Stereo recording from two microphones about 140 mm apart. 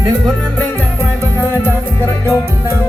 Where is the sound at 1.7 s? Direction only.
20° left (ahead or behind).